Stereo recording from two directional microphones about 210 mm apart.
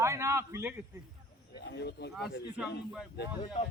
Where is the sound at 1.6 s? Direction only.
55° left (ahead or behind).